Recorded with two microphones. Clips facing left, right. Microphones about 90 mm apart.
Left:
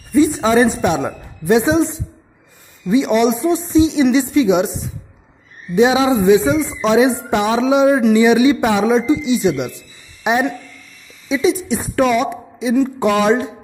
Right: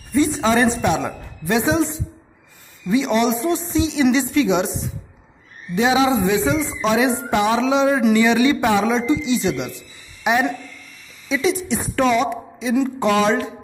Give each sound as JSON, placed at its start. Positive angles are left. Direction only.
{"t": 0.1, "sound": "a woman's voice", "side_deg": 10}
{"t": 5.8, "sound": "a man's voice", "side_deg": 20}